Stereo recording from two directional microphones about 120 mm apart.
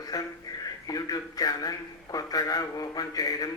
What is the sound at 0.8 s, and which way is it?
A man's voice, 30° left (ahead or behind).